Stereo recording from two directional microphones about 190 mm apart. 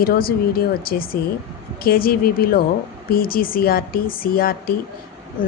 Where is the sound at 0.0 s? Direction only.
50° left (ahead or behind).